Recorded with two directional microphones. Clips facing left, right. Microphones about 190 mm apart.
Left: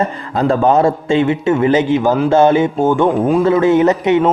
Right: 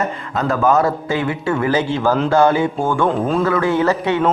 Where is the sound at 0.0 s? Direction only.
30° left (ahead or behind).